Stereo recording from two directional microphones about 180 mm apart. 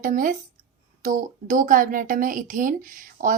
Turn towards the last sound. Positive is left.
turn(degrees=-50)  # may be behind; listen again after turning